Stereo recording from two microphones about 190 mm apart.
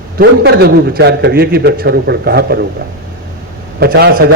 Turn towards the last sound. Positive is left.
turn(degrees=-55)  # may be behind; listen again after turning